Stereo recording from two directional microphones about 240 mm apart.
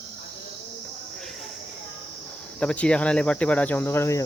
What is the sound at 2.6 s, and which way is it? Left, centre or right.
Cricket, centre.